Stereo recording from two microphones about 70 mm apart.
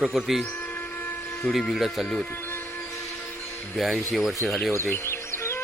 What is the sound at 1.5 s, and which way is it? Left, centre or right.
Speech, centre.